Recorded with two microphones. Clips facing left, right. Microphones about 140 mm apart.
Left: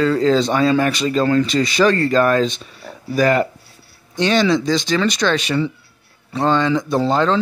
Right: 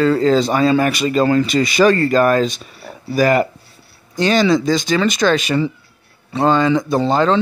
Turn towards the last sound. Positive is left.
turn(degrees=-5)  # may be behind; listen again after turning